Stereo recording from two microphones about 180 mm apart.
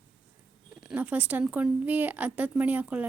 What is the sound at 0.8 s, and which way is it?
Speech, 5° right (ahead or behind).